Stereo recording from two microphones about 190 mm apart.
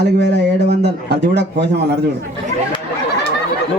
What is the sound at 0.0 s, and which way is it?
A man's voice, 60° right (ahead or behind).